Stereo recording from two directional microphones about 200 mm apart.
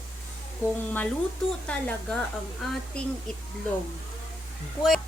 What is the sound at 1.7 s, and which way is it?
A woman's voice, 5° left (ahead or behind).